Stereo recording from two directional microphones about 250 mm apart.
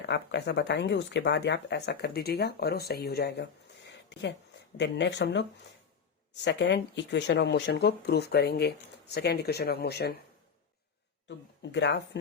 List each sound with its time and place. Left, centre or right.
0.0 s speech: left
11.3 s speech: left